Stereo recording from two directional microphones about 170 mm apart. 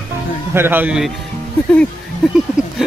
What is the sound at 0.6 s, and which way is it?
Speech, 10° right (ahead or behind).